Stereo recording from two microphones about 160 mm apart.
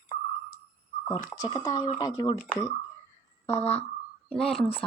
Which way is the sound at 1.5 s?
25° left (ahead or behind).